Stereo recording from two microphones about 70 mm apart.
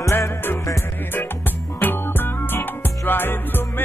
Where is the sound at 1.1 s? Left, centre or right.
Left.